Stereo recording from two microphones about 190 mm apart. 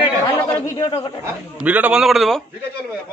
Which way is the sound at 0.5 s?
15° left (ahead or behind).